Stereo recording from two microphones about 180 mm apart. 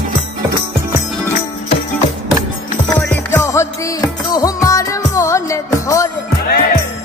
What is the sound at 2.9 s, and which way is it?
Music, 15° left (ahead or behind).